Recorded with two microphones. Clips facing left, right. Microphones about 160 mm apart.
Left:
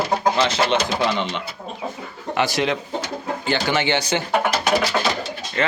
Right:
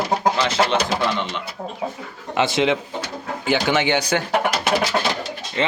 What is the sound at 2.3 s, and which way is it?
A man's voice, 20° right (ahead or behind).